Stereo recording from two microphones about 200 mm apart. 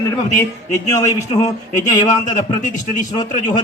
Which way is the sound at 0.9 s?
20° left (ahead or behind).